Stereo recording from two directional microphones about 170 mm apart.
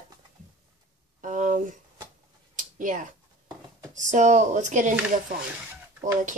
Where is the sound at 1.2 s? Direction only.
45° right (ahead or behind).